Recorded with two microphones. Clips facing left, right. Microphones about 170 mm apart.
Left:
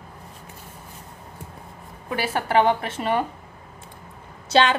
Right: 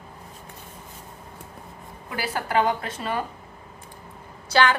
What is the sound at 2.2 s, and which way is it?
A woman's voice, 25° left (ahead or behind).